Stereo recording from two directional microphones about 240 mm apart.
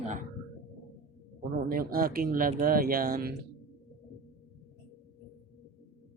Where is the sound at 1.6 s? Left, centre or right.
Right.